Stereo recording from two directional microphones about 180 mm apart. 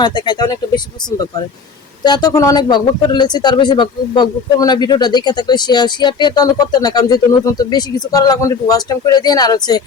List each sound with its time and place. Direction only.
0.0 s speech: 25° left (ahead or behind)
2.0 s speech: 25° left (ahead or behind)